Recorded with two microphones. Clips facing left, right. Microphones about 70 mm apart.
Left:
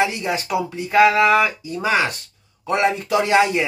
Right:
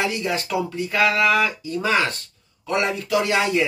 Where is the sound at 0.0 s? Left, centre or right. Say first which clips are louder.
Left 3 dB; left.